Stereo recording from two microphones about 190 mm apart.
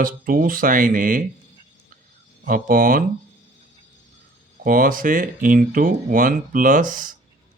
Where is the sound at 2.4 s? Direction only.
45° right (ahead or behind).